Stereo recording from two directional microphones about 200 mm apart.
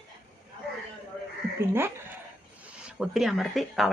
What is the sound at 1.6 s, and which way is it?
Speech, 10° right (ahead or behind).